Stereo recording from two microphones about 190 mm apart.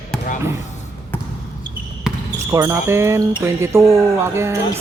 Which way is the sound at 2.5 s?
15° right (ahead or behind).